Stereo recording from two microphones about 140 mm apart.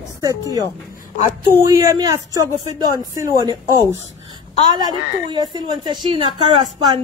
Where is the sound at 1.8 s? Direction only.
25° right (ahead or behind).